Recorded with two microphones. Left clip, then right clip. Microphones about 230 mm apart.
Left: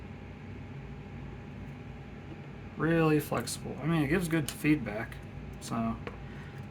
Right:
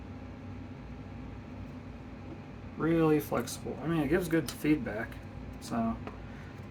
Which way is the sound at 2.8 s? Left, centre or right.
Left.